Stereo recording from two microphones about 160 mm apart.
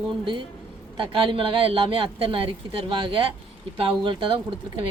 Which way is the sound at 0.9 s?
35° right (ahead or behind).